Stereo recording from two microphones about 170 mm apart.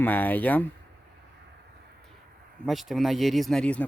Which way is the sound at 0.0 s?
10° left (ahead or behind).